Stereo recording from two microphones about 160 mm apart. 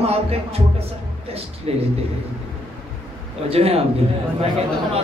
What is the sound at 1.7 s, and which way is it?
Speech, 40° right (ahead or behind).